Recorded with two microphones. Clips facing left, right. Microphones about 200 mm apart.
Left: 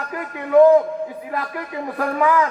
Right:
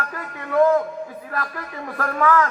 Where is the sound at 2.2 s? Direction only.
15° left (ahead or behind).